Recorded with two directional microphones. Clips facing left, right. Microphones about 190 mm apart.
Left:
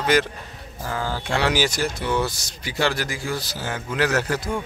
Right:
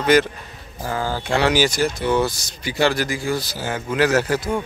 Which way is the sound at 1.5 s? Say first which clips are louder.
Right 4 dB; 15° right (ahead or behind).